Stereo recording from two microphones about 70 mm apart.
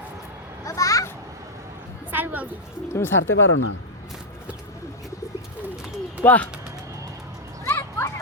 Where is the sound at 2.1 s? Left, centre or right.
Right.